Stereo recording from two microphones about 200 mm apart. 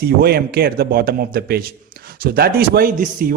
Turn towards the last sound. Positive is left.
turn(degrees=-40)  # may be behind; listen again after turning